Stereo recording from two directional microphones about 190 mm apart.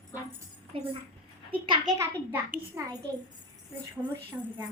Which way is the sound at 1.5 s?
25° right (ahead or behind).